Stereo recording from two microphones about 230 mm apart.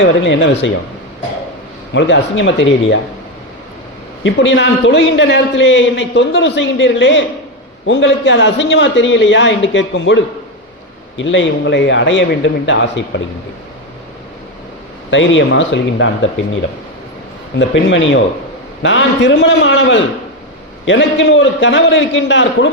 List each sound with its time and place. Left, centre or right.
0.0 s a man's voice: left
1.9 s a man's voice: left
4.2 s a man's voice: left
15.1 s a man's voice: left